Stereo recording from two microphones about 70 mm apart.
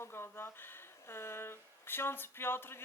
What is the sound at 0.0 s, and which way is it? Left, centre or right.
Speech, left.